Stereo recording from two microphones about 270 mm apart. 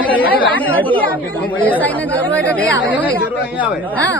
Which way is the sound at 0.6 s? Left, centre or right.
Centre.